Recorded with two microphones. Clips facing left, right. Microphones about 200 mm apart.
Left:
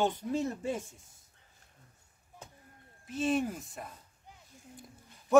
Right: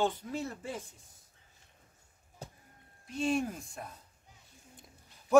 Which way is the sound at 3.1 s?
5° left (ahead or behind).